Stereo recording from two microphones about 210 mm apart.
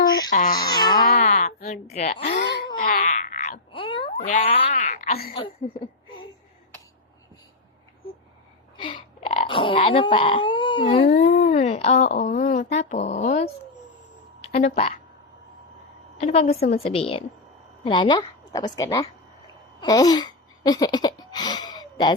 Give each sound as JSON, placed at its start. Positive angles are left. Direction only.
{"t": 0.3, "sound": "speech", "side_deg": 40}
{"t": 0.5, "sound": "babbling", "side_deg": 20}
{"t": 0.9, "sound": "livestock", "side_deg": 35}
{"t": 2.4, "sound": "wail", "side_deg": 50}
{"t": 3.7, "sound": "a sound", "side_deg": 25}
{"t": 4.3, "sound": "speech", "side_deg": 30}
{"t": 8.8, "sound": "speech", "side_deg": 25}
{"t": 11.1, "sound": "speech", "side_deg": 40}
{"t": 16.1, "sound": "a woman's voice", "side_deg": 30}
{"t": 19.8, "sound": "a sound", "side_deg": 20}